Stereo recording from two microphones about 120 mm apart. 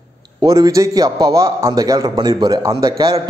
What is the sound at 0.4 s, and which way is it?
A man's voice, 30° right (ahead or behind).